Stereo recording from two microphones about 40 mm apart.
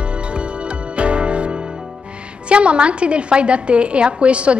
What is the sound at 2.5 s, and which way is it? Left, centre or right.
A woman's voice, right.